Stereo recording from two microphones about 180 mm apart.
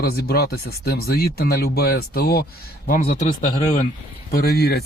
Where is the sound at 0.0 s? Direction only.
60° left (ahead or behind).